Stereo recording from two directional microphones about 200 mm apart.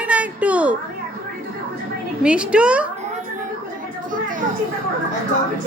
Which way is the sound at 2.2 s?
5° right (ahead or behind).